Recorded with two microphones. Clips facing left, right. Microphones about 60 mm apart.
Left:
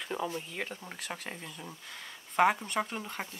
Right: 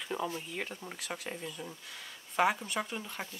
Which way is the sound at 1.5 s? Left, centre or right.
Centre.